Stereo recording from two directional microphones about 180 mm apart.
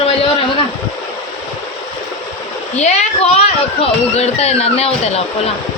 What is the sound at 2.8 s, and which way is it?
A woman's voice, 40° left (ahead or behind).